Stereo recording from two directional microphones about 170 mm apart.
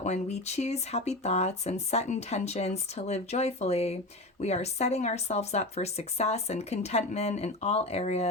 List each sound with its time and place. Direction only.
0.0 s speech: 40° left (ahead or behind)